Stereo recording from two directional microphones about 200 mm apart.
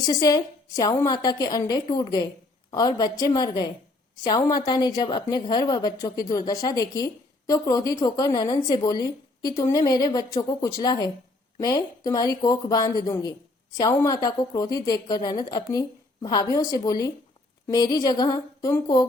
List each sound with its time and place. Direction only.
0.0 s a woman's voice: 20° left (ahead or behind)